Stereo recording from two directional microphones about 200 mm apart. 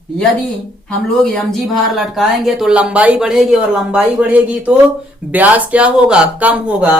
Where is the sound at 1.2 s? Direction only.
5° left (ahead or behind).